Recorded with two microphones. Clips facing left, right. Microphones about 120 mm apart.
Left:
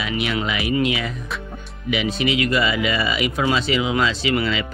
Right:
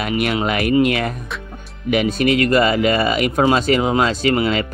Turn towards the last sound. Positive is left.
turn(degrees=-45)  # may be behind; listen again after turning